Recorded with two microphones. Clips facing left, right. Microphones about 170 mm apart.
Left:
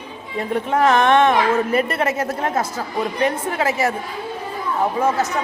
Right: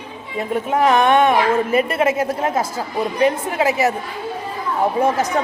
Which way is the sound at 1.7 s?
20° right (ahead or behind).